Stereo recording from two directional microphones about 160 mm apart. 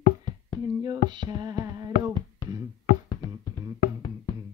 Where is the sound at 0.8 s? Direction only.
25° right (ahead or behind).